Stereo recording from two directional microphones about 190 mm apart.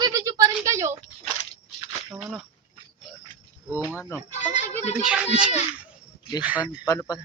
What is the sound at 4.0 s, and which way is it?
Speech, 10° left (ahead or behind).